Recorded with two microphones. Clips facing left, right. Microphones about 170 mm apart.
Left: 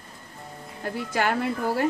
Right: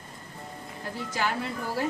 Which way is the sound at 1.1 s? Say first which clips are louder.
Left 5 dB; 60° left (ahead or behind).